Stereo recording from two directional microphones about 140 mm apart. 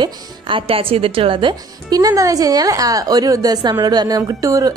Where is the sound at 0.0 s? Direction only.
40° right (ahead or behind).